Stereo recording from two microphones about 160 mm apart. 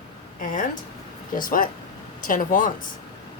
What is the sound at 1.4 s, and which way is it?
Speech, 60° left (ahead or behind).